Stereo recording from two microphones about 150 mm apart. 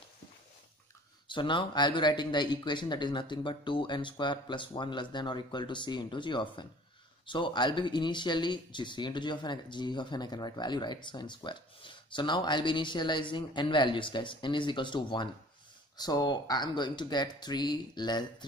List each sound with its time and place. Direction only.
1.2 s speech: 30° left (ahead or behind)